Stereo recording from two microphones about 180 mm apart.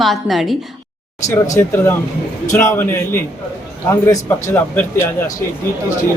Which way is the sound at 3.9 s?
15° left (ahead or behind).